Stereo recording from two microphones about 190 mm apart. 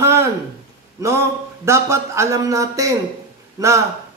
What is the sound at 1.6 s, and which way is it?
Speech, 15° right (ahead or behind).